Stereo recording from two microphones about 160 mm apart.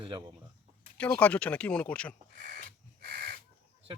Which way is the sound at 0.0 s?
30° right (ahead or behind).